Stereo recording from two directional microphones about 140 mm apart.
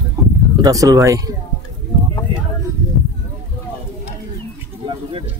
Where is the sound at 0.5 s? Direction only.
25° right (ahead or behind).